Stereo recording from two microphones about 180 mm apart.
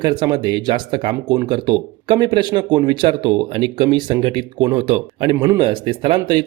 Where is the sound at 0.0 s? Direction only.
25° right (ahead or behind).